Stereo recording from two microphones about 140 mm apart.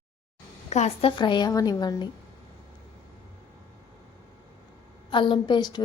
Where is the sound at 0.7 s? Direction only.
50° left (ahead or behind).